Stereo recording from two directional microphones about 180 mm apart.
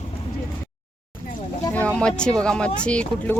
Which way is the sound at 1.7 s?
5° left (ahead or behind).